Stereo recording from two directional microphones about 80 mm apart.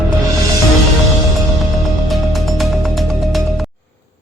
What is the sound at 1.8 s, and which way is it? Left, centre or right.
Music, centre.